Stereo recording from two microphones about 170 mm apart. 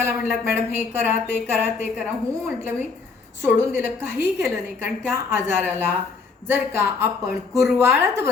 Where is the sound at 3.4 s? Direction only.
10° right (ahead or behind).